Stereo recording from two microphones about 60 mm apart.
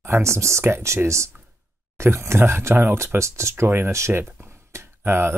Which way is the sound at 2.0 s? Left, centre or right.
Right.